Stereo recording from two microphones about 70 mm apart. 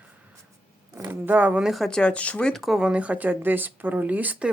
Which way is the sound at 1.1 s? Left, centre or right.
Right.